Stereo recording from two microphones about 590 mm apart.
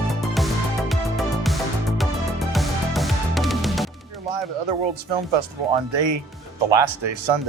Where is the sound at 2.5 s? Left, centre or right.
Centre.